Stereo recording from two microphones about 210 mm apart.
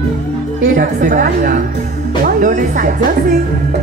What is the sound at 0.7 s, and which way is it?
Speech, 40° right (ahead or behind).